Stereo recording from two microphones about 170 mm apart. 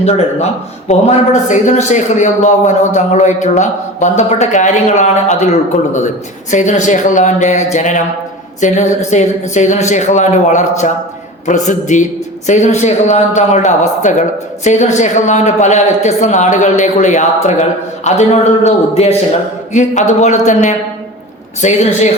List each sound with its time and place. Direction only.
0.0 s speech: 40° left (ahead or behind)